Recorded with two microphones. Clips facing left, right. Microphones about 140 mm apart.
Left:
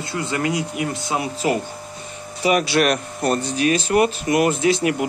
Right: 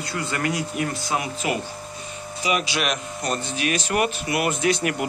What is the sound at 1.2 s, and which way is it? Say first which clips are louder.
Speech: left 5 dB; 35° left (ahead or behind).